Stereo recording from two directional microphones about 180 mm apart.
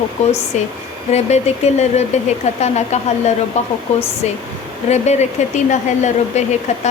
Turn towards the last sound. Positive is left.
turn(degrees=40)  # may be behind; listen again after turning